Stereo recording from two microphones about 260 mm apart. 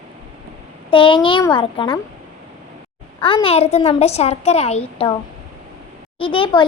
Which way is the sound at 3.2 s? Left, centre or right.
Centre.